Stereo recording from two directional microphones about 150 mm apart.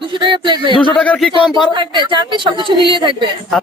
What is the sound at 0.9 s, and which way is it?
Speech, 5° left (ahead or behind).